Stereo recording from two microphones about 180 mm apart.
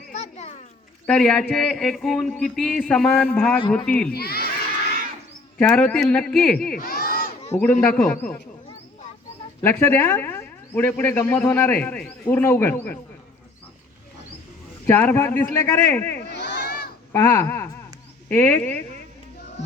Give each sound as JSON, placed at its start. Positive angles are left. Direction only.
{"t": 0.1, "sound": "children playing", "side_deg": 35}
{"t": 1.0, "sound": "speech", "side_deg": 5}
{"t": 4.1, "sound": "speech", "side_deg": 60}
{"t": 5.5, "sound": "speech", "side_deg": 5}
{"t": 6.7, "sound": "a sound", "side_deg": 55}
{"t": 7.5, "sound": "speech", "side_deg": 5}
{"t": 9.6, "sound": "speech", "side_deg": 10}
{"t": 14.8, "sound": "speech", "side_deg": 10}
{"t": 16.3, "sound": "crowd", "side_deg": 70}
{"t": 17.1, "sound": "speech", "side_deg": 15}